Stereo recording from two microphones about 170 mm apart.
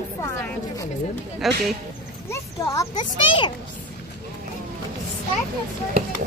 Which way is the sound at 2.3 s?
20° left (ahead or behind).